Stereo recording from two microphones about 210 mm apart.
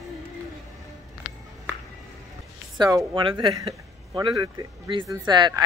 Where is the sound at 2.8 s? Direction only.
20° right (ahead or behind).